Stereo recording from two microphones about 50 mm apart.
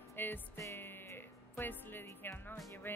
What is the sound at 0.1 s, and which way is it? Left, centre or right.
Music, left.